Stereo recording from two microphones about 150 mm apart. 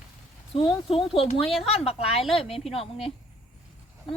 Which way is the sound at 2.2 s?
Centre (ahead or behind).